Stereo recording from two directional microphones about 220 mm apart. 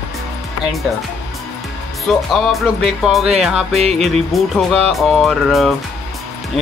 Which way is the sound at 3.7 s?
30° right (ahead or behind).